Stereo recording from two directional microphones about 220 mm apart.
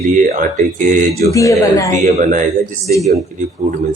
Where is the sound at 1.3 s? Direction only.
15° left (ahead or behind).